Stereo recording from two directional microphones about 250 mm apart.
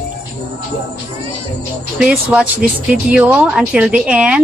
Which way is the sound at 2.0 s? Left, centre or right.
Centre.